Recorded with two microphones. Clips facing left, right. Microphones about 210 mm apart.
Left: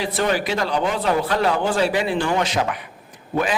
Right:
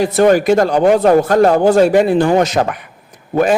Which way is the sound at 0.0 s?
45° right (ahead or behind).